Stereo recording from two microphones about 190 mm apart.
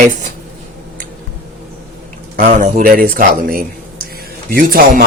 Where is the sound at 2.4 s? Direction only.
45° right (ahead or behind).